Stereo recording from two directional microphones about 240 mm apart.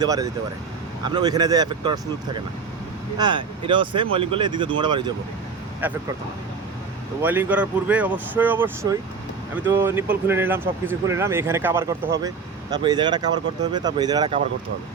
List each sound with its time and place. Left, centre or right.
0.0 s speech: centre
5.8 s speech: centre
7.2 s speech: centre